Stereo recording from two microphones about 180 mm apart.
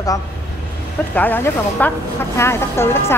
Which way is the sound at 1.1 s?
10° left (ahead or behind).